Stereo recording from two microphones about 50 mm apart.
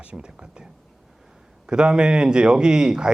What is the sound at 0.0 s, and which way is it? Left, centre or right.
A man's voice, right.